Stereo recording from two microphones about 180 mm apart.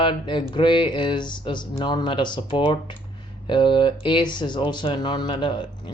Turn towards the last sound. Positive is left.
turn(degrees=25)  # may be behind; listen again after turning